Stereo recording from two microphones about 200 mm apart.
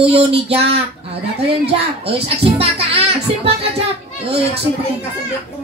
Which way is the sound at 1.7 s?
30° right (ahead or behind).